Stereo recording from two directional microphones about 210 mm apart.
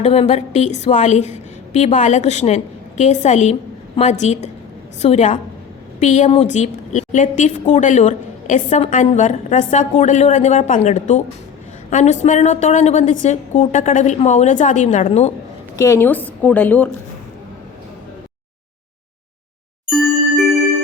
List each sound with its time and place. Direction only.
0.0 s a woman's voice: 30° left (ahead or behind)
15.7 s a woman's voice: 15° left (ahead or behind)
19.9 s ding: centre (ahead or behind)